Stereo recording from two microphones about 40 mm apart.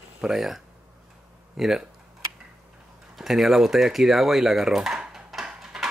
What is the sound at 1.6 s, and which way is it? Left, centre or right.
Speech, centre.